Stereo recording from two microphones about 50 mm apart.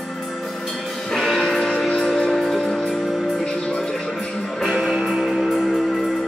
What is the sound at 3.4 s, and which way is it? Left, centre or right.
Music, centre.